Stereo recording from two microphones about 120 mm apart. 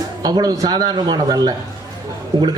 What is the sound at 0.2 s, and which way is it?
A man's voice, 30° right (ahead or behind).